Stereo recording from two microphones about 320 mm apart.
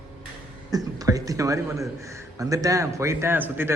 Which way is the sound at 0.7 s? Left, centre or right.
Centre.